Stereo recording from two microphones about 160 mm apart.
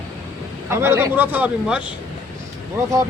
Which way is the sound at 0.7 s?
15° right (ahead or behind).